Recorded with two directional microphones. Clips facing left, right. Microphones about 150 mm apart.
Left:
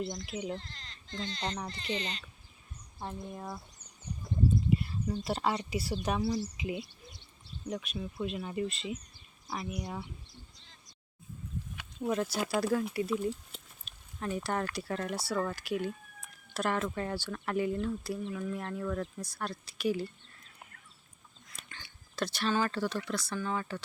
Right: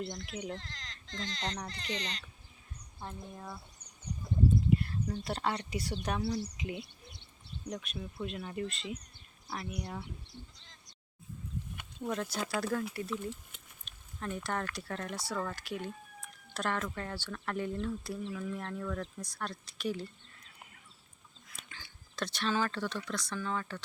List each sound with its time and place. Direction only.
0.2 s speech: 5° left (ahead or behind)
0.6 s speech: 90° right
1.4 s speech: 5° left (ahead or behind)
3.0 s speech: 15° left (ahead or behind)
4.8 s a sound: 5° left (ahead or behind)
5.2 s speech: 5° left (ahead or behind)
12.0 s speech: 10° left (ahead or behind)
16.8 s speech: 20° left (ahead or behind); by 20.1 s 5° left (ahead or behind)
21.5 s speech: centre (ahead or behind)